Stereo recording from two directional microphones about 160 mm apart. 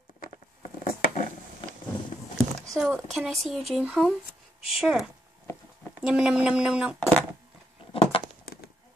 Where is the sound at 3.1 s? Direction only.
Centre (ahead or behind).